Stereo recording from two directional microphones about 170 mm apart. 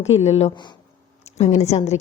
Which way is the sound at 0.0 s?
40° left (ahead or behind).